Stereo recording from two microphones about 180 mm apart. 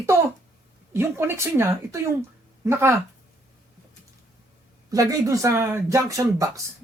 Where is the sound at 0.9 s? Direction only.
15° right (ahead or behind).